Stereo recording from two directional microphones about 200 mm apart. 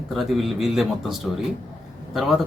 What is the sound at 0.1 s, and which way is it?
Speech, centre (ahead or behind).